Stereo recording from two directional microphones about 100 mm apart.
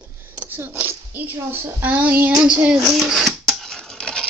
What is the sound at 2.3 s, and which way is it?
Speech, 10° right (ahead or behind).